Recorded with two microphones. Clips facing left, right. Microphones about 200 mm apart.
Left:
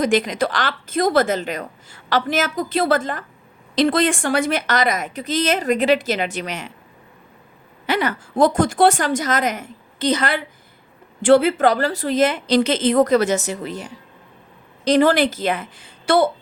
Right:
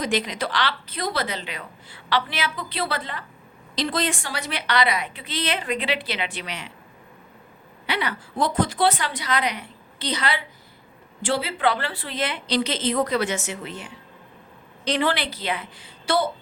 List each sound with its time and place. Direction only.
0.0 s a woman's voice: 50° left (ahead or behind)
7.9 s a woman's voice: 45° left (ahead or behind)